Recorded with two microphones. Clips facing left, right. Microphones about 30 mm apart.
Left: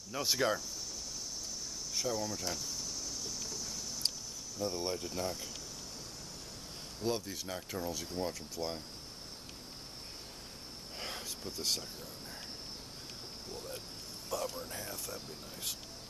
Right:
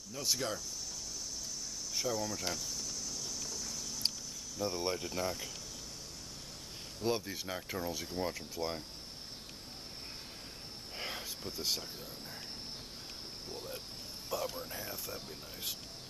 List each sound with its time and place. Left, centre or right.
0.1 s speech: left
2.0 s speech: centre
3.3 s a sound: centre
4.6 s speech: centre
7.0 s speech: centre
11.0 s a sound: centre
14.3 s speech: centre